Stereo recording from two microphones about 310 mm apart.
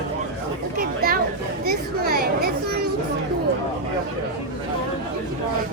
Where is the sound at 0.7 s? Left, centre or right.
Right.